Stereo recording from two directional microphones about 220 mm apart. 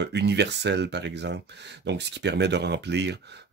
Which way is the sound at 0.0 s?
50° right (ahead or behind).